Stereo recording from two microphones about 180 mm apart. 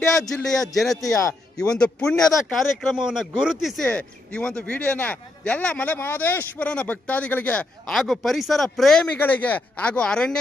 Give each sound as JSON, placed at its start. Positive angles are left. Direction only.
{"t": 0.3, "sound": "speech", "side_deg": 5}